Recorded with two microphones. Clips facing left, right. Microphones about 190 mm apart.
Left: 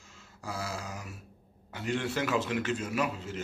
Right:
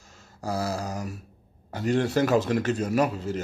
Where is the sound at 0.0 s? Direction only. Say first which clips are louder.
Right 8 dB; 40° right (ahead or behind).